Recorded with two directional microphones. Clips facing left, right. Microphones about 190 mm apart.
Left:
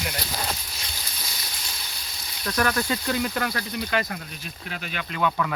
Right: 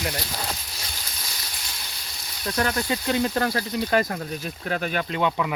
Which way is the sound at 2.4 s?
25° right (ahead or behind).